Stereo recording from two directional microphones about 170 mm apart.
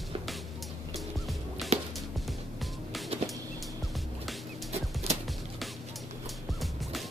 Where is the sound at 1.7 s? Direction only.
40° right (ahead or behind).